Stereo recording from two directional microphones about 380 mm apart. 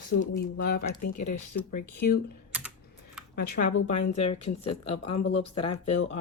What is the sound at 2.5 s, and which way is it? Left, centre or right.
Typing, centre.